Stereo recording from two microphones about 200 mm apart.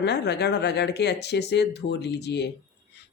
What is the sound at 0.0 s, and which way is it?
Speech, 55° left (ahead or behind).